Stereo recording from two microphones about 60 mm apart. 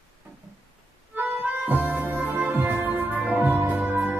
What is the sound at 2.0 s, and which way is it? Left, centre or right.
Music, right.